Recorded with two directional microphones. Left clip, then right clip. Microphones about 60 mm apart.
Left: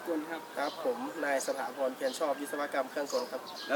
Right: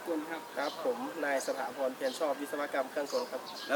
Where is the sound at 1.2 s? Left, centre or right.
Centre.